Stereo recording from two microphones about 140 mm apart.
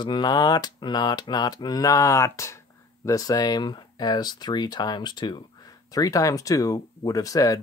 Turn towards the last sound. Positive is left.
turn(degrees=25)  # may be behind; listen again after turning